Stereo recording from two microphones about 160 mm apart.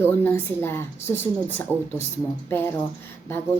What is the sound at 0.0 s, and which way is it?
A woman's voice, 15° left (ahead or behind).